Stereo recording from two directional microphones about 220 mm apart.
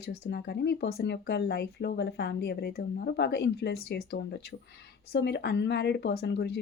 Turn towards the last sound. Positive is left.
turn(degrees=50)  # may be behind; listen again after turning